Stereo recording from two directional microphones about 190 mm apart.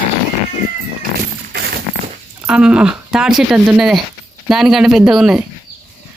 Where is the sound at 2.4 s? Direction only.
5° right (ahead or behind).